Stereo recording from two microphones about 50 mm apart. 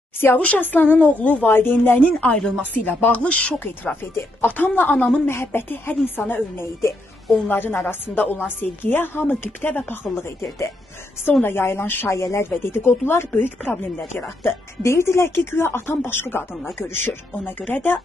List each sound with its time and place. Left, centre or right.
0.4 s a woman's voice: left
0.7 s speech: left
0.9 s a woman's voice: left
1.5 s speech: left
2.3 s speech: centre
2.8 s speech: left
4.0 s speech: left
4.5 s speech: left
5.2 s speech: left
11.4 s speech: left
12.1 s speech: left
12.4 s speech: left
13.6 s speech: left